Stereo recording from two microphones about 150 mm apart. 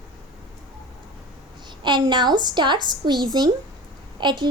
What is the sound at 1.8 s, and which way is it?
A woman's voice, 30° right (ahead or behind).